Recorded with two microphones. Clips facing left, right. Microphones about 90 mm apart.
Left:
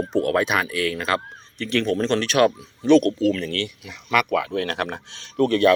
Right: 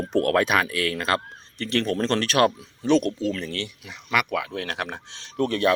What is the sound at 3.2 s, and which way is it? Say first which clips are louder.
Speech: left 5 dB; 25° right (ahead or behind).